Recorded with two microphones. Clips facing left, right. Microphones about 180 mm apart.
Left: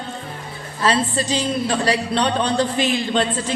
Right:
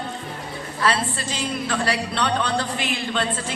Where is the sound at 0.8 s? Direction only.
20° left (ahead or behind).